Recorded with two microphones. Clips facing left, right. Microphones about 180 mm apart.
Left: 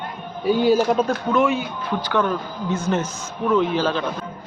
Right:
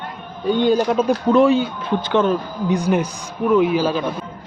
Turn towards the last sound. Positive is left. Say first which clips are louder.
# right 3 dB
turn(degrees=-10)  # may be behind; listen again after turning